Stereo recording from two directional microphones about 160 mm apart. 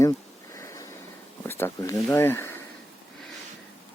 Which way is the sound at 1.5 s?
15° left (ahead or behind).